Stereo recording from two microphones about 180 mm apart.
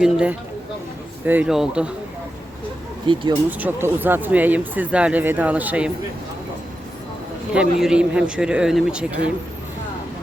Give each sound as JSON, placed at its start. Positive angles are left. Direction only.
{"t": 0.0, "sound": "a man's voice", "side_deg": -5}
{"t": 3.1, "sound": "speech", "side_deg": -25}
{"t": 3.6, "sound": "speech", "side_deg": -10}
{"t": 7.5, "sound": "a man's voice", "side_deg": -5}